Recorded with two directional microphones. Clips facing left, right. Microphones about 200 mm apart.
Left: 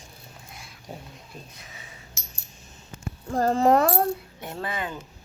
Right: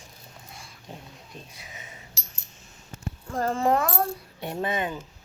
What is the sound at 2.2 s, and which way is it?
Coin, 35° right (ahead or behind).